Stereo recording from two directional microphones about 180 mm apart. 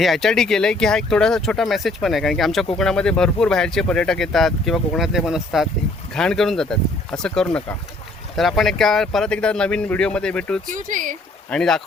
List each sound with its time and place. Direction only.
0.0 s speech: centre (ahead or behind)
10.7 s speech: 45° right (ahead or behind)
11.4 s speech: 5° left (ahead or behind)